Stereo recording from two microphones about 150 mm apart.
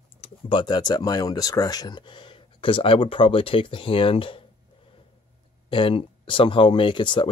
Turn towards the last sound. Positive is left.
turn(degrees=30)  # may be behind; listen again after turning